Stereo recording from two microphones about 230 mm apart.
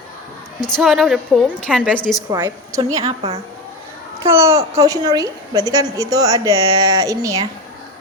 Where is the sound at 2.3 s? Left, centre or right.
Centre.